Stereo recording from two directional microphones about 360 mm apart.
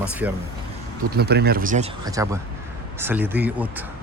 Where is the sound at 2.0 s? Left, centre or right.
Centre.